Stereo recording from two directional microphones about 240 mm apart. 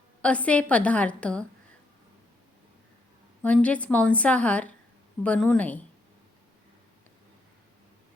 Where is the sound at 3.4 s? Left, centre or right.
Centre.